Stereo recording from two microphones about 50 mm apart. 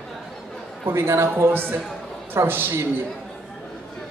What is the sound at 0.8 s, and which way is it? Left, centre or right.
Speech, right.